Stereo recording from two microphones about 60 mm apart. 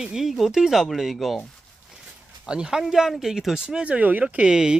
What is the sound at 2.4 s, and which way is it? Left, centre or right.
Speech, centre.